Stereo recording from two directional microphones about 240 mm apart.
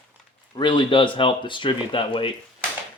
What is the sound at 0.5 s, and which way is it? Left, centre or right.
Speech, centre.